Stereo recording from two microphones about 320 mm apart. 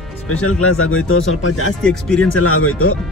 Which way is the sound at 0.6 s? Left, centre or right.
Left.